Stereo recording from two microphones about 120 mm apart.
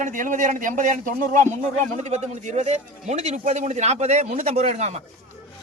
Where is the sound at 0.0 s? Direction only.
90° right; by 4.9 s 70° right (ahead or behind).